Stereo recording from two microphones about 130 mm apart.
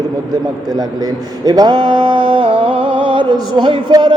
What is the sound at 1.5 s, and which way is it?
Music, 30° right (ahead or behind).